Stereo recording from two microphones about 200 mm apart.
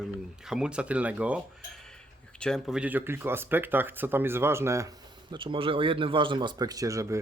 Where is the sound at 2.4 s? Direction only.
Centre (ahead or behind).